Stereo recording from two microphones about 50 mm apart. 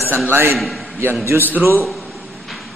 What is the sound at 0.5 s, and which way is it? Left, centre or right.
Speech, centre.